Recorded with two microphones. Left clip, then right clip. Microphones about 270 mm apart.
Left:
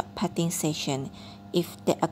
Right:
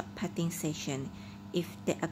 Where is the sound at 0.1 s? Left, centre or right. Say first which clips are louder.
Left 8 dB; centre.